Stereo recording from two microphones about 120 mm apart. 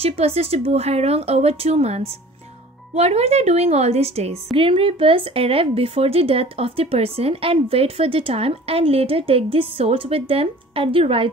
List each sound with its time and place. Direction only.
0.0 s a woman's voice: 55° right (ahead or behind)